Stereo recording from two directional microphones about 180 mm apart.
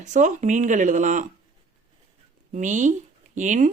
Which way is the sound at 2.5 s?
45° right (ahead or behind).